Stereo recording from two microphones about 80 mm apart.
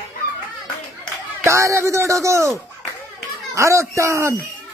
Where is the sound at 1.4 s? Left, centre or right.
Right.